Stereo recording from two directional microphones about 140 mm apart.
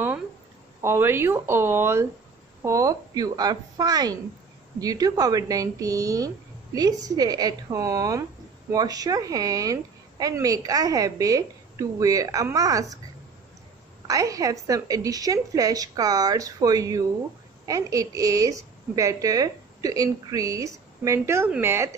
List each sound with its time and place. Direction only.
0.8 s a woman's voice: 15° right (ahead or behind)
14.0 s a woman's voice: 25° right (ahead or behind)